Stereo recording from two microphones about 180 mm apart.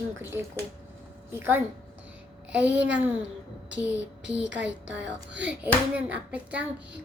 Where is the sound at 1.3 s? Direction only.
10° right (ahead or behind).